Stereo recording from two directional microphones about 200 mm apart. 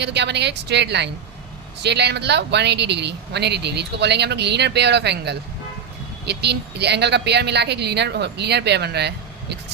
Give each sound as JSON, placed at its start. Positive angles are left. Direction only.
{"t": 0.0, "sound": "speech", "side_deg": -60}